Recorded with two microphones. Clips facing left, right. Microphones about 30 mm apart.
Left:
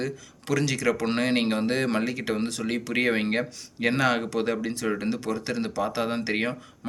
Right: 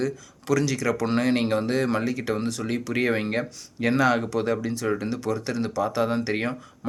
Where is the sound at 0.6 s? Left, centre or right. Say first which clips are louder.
Even; left.